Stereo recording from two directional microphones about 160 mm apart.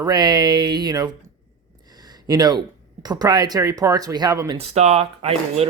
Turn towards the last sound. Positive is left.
turn(degrees=-40)  # may be behind; listen again after turning